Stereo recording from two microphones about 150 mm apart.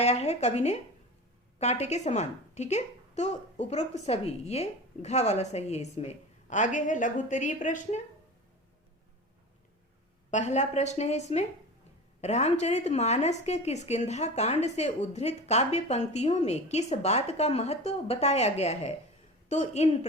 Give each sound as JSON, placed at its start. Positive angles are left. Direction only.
{"t": 0.0, "sound": "a woman's voice", "side_deg": 45}
{"t": 10.3, "sound": "a woman's voice", "side_deg": 50}